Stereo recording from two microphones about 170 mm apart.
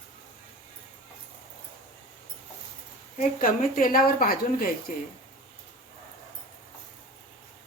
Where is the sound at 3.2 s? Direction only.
55° left (ahead or behind).